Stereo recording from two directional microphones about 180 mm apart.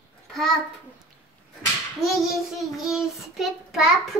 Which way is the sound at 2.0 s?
Centre (ahead or behind).